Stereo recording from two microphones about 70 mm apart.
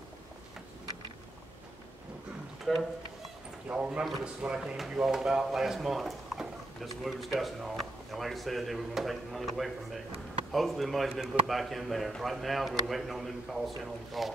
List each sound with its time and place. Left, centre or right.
2.6 s speech: centre
3.7 s a man's voice: centre